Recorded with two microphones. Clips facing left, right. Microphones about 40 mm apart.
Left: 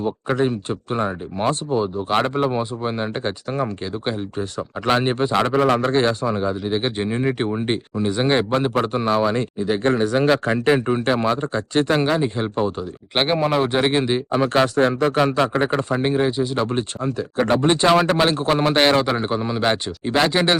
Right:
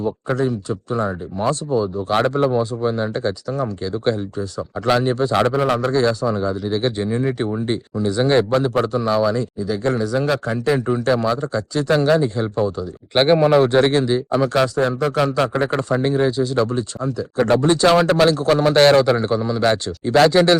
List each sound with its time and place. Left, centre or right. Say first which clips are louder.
0.0 s speech: even; left
2.0 s a man's voice: right 3 dB; left
4.9 s speech: right 1 dB; left
11.9 s a man's voice: right 3 dB; left
13.1 s a man's voice: right 5 dB; centre
14.0 s a man's voice: right 2 dB; left
14.8 s speech: left 1 dB; left
15.0 s a man's voice: even; left
16.7 s speech: even; left
17.3 s a man's voice: right 2 dB; left